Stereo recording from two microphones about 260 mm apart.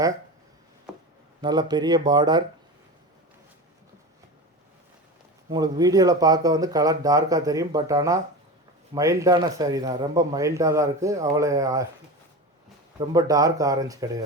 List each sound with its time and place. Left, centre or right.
1.4 s a man's voice: centre
5.5 s a man's voice: centre
13.0 s a man's voice: centre